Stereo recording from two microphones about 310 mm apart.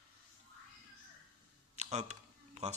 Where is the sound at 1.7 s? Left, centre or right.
Right.